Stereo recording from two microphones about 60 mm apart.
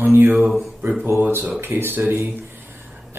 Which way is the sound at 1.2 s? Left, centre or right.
Right.